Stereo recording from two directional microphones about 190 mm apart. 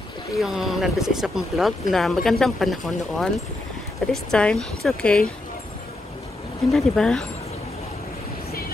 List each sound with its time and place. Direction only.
0.4 s speech: centre (ahead or behind)
6.7 s speech: 5° left (ahead or behind)
8.5 s vehicle: 50° left (ahead or behind)